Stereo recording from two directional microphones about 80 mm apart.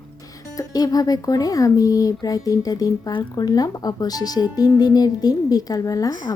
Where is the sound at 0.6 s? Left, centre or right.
Left.